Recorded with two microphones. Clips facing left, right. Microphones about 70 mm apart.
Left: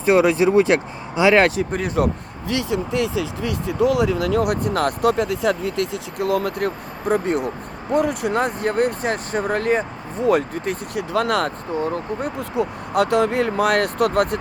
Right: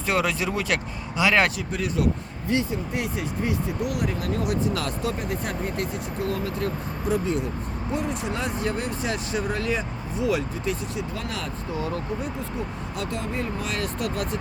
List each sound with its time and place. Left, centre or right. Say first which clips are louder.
0.0 s speech: left 9 dB; left
2.5 s speech: left 3 dB; left
4.4 s speech: left 4 dB; left
5.1 s speech: left 9 dB; left
6.7 s speech: left 5 dB; left
11.7 s speech: left 3 dB; left
12.2 s speech: left 7 dB; left